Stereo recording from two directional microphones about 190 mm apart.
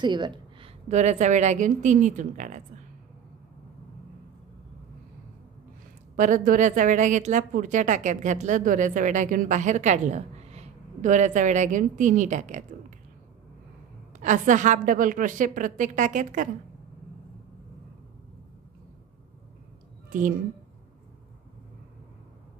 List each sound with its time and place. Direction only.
0.0 s speech: 25° right (ahead or behind)
0.8 s a woman's voice: 35° right (ahead or behind)
6.1 s a woman's voice: 45° right (ahead or behind)
14.2 s a woman's voice: 40° right (ahead or behind)
20.1 s a woman's voice: 45° right (ahead or behind)